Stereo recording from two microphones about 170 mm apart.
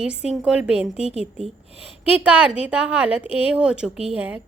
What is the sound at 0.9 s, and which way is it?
A woman's voice, 35° left (ahead or behind).